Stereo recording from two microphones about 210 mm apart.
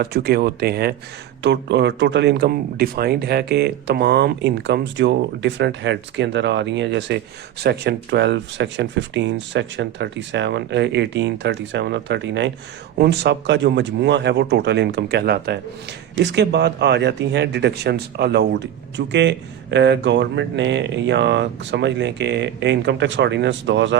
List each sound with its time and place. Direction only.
0.0 s speech: 50° right (ahead or behind)